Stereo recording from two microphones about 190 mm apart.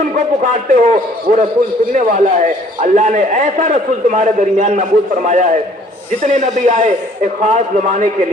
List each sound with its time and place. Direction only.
0.5 s a man's voice: 40° right (ahead or behind)